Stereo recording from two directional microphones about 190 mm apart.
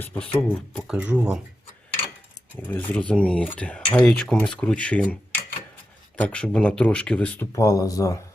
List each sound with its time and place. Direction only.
0.0 s speech: 5° left (ahead or behind)
2.6 s speech: 10° left (ahead or behind)
6.1 s speech: 5° left (ahead or behind)
7.5 s speech: 15° left (ahead or behind)